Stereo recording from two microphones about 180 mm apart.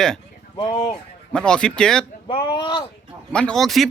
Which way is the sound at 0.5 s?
20° left (ahead or behind).